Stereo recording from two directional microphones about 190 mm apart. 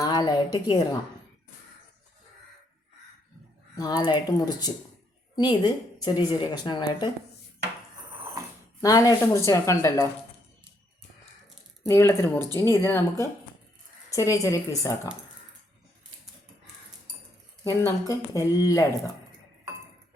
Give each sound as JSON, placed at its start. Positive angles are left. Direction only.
{"t": 0.0, "sound": "a woman's voice", "side_deg": 20}
{"t": 3.8, "sound": "speech", "side_deg": 20}
{"t": 8.8, "sound": "a woman's voice", "side_deg": 20}
{"t": 11.9, "sound": "a woman's voice", "side_deg": 15}
{"t": 14.1, "sound": "a woman's voice", "side_deg": 15}
{"t": 17.6, "sound": "a woman's voice", "side_deg": 20}